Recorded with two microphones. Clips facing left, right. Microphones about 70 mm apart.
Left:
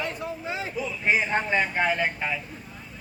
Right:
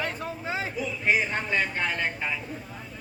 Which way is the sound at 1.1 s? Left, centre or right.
Left.